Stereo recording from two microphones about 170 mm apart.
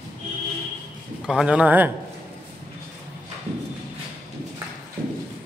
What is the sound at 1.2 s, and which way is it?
Speech, 5° right (ahead or behind).